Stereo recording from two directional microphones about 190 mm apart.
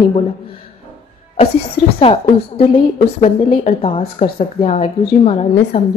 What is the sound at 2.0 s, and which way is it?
A woman's voice, 30° left (ahead or behind).